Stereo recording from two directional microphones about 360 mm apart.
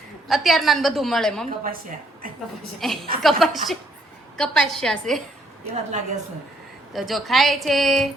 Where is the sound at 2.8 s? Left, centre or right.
Centre.